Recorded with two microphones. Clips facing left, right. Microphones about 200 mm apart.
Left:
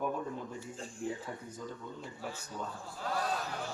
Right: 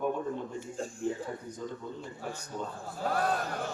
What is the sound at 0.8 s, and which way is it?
Speech, 45° right (ahead or behind).